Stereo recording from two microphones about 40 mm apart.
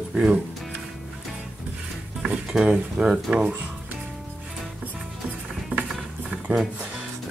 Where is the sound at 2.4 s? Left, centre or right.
Centre.